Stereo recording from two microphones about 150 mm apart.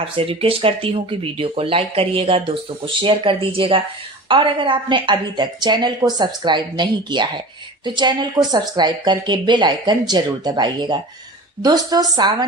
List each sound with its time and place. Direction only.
0.0 s a woman's voice: 40° right (ahead or behind)